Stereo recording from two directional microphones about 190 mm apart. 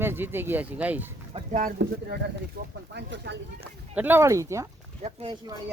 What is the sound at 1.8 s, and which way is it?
Speech, 70° right (ahead or behind).